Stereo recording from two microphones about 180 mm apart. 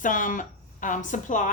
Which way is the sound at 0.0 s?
45° left (ahead or behind).